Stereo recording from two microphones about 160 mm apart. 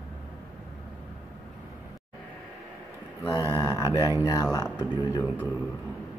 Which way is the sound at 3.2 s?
25° left (ahead or behind).